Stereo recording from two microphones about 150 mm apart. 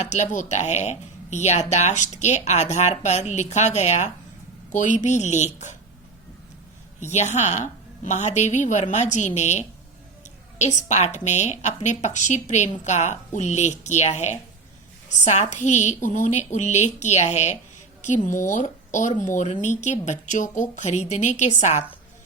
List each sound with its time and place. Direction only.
0.0 s speech: 50° left (ahead or behind)
7.0 s speech: 50° left (ahead or behind)